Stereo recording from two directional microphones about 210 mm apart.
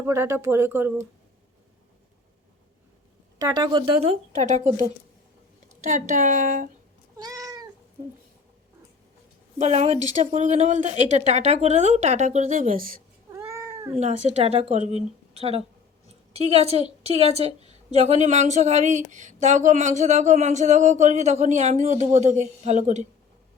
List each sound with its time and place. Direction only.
0.0 s speech: 10° right (ahead or behind)
3.3 s a woman's voice: 20° right (ahead or behind); by 6.7 s 40° right (ahead or behind)
7.2 s cat: 15° right (ahead or behind)
9.6 s a woman's voice: 30° right (ahead or behind)
13.3 s cat: 15° right (ahead or behind)
14.0 s a woman's voice: 35° right (ahead or behind)